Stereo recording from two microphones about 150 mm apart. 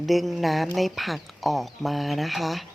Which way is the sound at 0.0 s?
Centre (ahead or behind).